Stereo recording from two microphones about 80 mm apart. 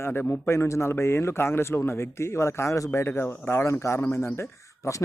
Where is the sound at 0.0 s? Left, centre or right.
Left.